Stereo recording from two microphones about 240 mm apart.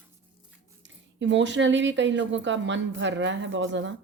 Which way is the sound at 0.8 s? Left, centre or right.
Right.